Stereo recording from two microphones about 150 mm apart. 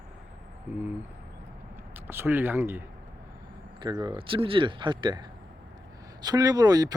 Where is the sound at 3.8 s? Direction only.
30° right (ahead or behind).